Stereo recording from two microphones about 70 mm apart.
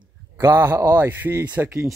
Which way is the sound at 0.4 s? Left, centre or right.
Right.